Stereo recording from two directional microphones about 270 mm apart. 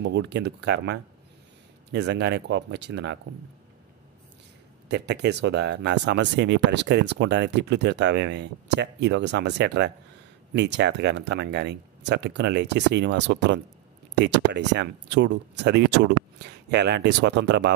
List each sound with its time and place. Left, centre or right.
0.0 s speech: right
4.8 s speech: right